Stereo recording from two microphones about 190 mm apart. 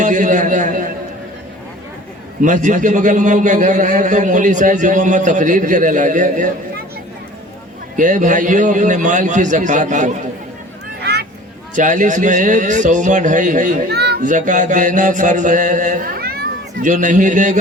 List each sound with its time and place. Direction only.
0.0 s a sound: 40° right (ahead or behind)
2.4 s a man's voice: 40° right (ahead or behind)
7.9 s a man's voice: 45° right (ahead or behind)
11.0 s a sound: 55° right (ahead or behind)
11.7 s a man's voice: 45° right (ahead or behind)
13.9 s a child's voice: 60° right (ahead or behind)
14.2 s music: 40° right (ahead or behind)
16.8 s a man's voice: 40° right (ahead or behind)